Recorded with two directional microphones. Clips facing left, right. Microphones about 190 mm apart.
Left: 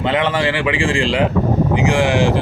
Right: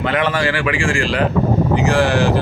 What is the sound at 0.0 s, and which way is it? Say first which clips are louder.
Speech: left 1 dB; 25° left (ahead or behind).